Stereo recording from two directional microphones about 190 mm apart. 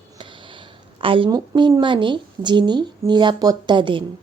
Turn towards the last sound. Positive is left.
turn(degrees=-25)  # may be behind; listen again after turning